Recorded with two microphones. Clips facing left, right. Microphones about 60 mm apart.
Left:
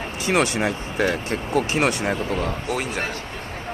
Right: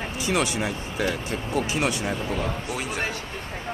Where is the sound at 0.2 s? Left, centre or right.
Left.